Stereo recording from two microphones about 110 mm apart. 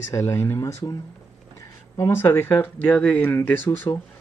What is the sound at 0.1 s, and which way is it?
Speech, 25° left (ahead or behind).